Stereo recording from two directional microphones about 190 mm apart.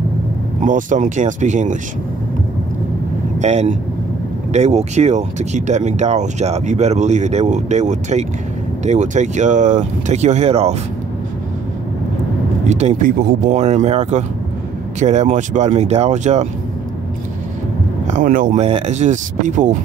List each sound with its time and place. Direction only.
0.7 s speech: 40° right (ahead or behind)
3.3 s speech: 35° right (ahead or behind)
12.6 s speech: 35° right (ahead or behind)
18.0 s speech: 40° right (ahead or behind)